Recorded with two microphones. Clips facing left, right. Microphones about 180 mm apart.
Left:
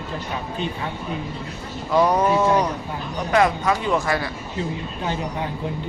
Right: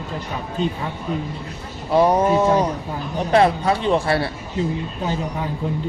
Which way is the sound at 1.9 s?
25° right (ahead or behind).